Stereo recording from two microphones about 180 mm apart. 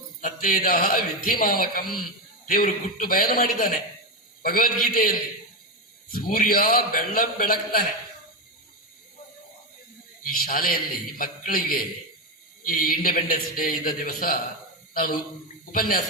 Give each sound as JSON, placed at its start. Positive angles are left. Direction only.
{"t": 0.2, "sound": "a man's voice", "side_deg": 50}
{"t": 10.2, "sound": "a man's voice", "side_deg": 55}